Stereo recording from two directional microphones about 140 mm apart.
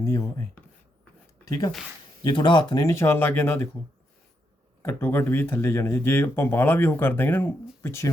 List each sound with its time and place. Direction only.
0.0 s speech: 25° left (ahead or behind)
1.5 s speech: 25° left (ahead or behind)
4.8 s speech: 15° left (ahead or behind)